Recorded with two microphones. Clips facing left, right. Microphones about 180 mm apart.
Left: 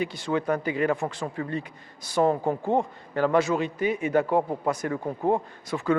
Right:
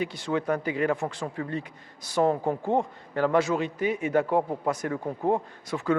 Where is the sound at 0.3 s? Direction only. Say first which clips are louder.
Left 1 dB; 20° left (ahead or behind).